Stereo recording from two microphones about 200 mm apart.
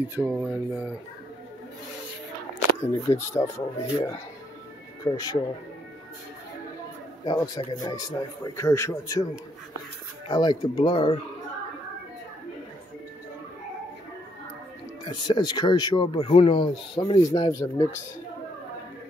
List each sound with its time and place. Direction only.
0.1 s a sound: 5° right (ahead or behind)
2.8 s a man's voice: 15° left (ahead or behind)
7.2 s a man's voice: 20° left (ahead or behind)
15.0 s speech: 20° left (ahead or behind)